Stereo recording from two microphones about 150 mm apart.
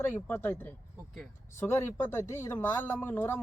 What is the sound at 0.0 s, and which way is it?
Speech, 10° left (ahead or behind).